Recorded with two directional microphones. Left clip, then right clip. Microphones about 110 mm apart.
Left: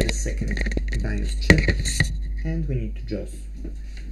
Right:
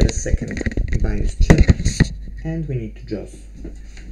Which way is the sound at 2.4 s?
40° left (ahead or behind).